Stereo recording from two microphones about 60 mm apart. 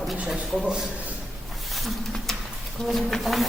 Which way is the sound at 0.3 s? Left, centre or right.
Centre.